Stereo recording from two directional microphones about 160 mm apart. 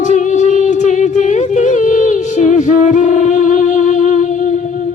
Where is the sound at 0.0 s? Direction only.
50° left (ahead or behind).